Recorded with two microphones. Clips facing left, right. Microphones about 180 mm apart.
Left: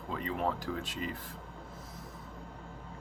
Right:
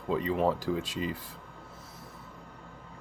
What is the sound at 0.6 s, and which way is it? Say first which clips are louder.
Speech: right 5 dB; 10° right (ahead or behind).